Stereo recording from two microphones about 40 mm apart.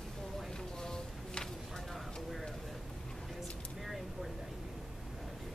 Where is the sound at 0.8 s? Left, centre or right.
Centre.